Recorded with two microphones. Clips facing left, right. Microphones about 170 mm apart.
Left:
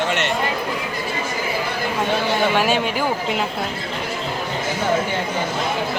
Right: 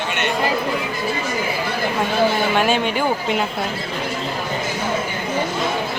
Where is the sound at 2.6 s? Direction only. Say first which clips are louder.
Right 1 dB; 5° left (ahead or behind).